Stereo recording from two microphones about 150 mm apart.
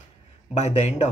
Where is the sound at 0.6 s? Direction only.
45° left (ahead or behind).